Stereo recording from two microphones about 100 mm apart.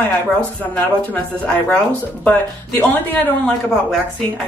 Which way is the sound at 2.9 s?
15° left (ahead or behind).